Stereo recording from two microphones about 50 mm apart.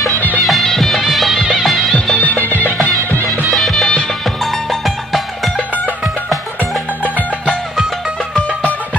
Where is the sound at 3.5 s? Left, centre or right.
Centre.